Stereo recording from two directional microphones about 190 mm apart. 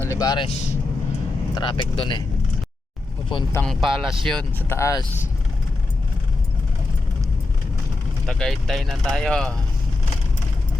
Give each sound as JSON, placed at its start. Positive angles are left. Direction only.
{"t": 0.0, "sound": "speech", "side_deg": 15}
{"t": 1.5, "sound": "speech", "side_deg": 25}
{"t": 3.5, "sound": "speech", "side_deg": 5}
{"t": 8.3, "sound": "speech", "side_deg": 0}